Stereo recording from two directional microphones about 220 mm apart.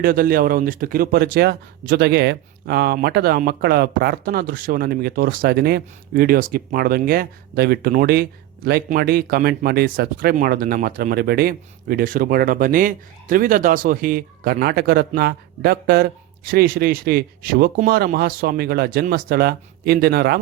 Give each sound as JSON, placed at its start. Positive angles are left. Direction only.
{"t": 0.0, "sound": "speech", "side_deg": -40}